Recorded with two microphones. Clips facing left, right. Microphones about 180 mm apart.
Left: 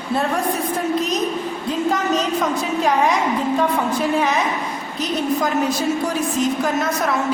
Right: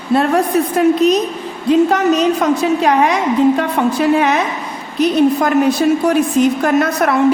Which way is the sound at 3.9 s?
65° right (ahead or behind).